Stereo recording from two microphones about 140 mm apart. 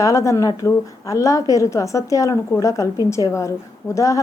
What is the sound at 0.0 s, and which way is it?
Speech, 25° left (ahead or behind).